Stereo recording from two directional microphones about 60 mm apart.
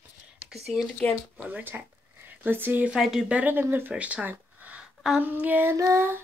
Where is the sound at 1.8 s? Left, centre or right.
Right.